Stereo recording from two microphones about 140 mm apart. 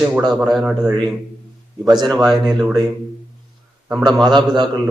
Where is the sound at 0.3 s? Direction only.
5° right (ahead or behind).